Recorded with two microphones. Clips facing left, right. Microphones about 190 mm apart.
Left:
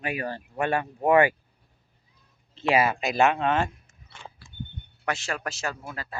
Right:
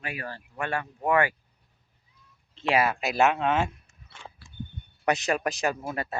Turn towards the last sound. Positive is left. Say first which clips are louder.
# right 6 dB
turn(degrees=-25)  # may be behind; listen again after turning